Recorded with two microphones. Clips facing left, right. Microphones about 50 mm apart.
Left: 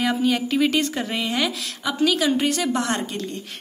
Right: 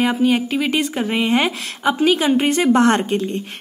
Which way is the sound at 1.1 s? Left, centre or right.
Right.